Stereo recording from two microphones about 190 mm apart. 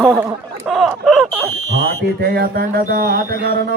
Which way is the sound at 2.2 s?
55° right (ahead or behind).